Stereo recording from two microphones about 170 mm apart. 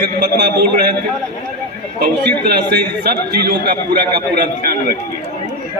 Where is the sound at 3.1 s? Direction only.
65° right (ahead or behind).